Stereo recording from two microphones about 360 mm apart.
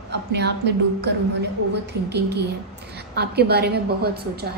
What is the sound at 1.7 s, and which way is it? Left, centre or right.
A woman's voice, right.